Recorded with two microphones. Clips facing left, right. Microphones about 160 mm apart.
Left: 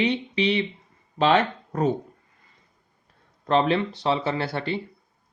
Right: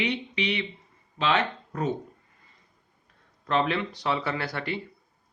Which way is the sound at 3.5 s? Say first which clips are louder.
Left 5 dB; 30° left (ahead or behind).